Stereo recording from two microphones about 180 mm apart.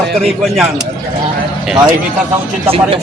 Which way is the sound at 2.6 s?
30° right (ahead or behind).